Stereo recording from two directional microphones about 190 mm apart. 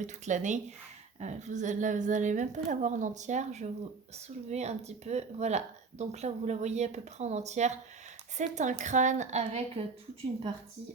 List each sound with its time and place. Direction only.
0.0 s a woman's voice: 40° right (ahead or behind)